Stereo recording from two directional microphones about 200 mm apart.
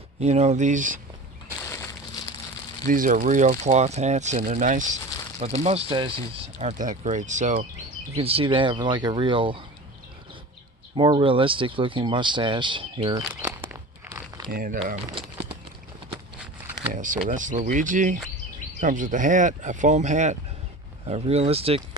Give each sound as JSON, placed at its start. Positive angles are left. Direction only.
{"t": 0.2, "sound": "speech", "side_deg": -35}
{"t": 2.8, "sound": "speech", "side_deg": -40}
{"t": 5.6, "sound": "speech", "side_deg": -30}
{"t": 10.9, "sound": "speech", "side_deg": -25}
{"t": 14.5, "sound": "speech", "side_deg": -45}
{"t": 16.4, "sound": "a sound", "side_deg": -10}
{"t": 16.9, "sound": "speech", "side_deg": -40}